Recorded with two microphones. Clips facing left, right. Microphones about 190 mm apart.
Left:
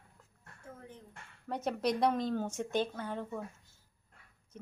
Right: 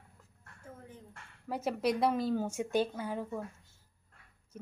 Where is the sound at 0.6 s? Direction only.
Centre (ahead or behind).